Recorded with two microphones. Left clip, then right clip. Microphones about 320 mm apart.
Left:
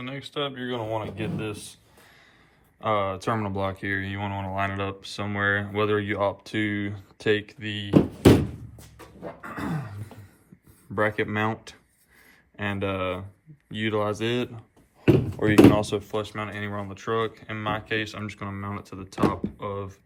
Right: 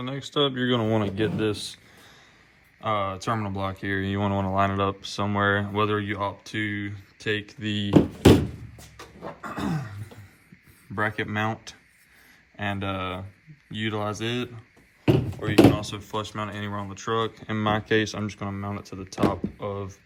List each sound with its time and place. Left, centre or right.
0.0 s speech: centre; by 1.5 s right
2.8 s speech: centre
7.4 s speech: centre
7.9 s door: centre
9.4 s a sound: centre
10.9 s speech: centre
15.4 s speech: left
15.8 s speech: centre